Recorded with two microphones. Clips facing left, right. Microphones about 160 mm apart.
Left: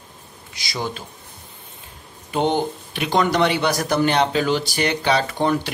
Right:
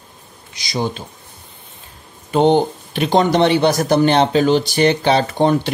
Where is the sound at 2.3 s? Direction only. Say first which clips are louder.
Right 7 dB; 30° right (ahead or behind).